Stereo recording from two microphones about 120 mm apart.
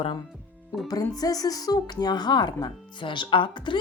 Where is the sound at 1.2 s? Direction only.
30° left (ahead or behind).